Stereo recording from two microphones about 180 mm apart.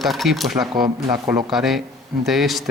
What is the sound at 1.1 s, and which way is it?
Speech, 15° right (ahead or behind).